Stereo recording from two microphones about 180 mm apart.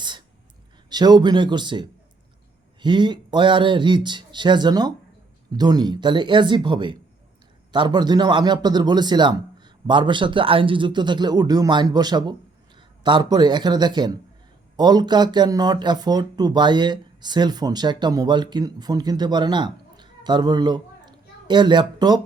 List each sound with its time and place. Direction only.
0.9 s speech: 25° right (ahead or behind)